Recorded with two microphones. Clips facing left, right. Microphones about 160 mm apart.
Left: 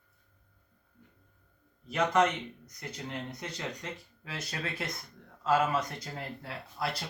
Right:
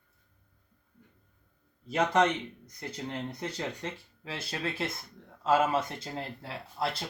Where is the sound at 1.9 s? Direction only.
30° right (ahead or behind).